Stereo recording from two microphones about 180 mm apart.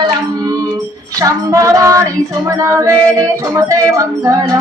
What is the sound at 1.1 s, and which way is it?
Female singing, 20° right (ahead or behind).